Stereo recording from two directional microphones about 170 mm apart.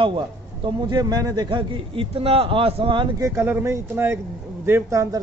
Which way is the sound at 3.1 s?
15° right (ahead or behind).